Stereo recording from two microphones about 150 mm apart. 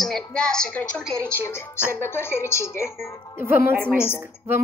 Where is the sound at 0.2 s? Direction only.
5° left (ahead or behind).